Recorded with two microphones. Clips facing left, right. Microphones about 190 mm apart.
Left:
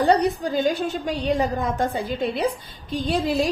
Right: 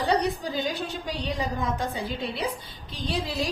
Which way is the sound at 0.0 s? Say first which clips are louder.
Left 6 dB; 50° left (ahead or behind).